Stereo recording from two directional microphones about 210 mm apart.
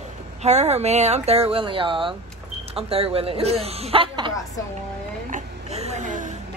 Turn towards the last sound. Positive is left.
turn(degrees=-35)  # may be behind; listen again after turning